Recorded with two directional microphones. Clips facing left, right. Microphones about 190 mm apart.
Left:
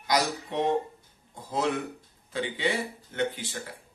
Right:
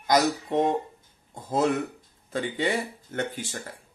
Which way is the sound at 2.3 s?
45° right (ahead or behind).